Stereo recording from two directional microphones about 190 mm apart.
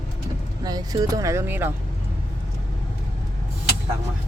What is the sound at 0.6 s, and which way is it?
Speech, 20° right (ahead or behind).